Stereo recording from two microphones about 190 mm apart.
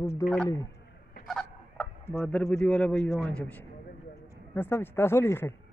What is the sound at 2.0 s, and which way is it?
A man's voice, 10° left (ahead or behind).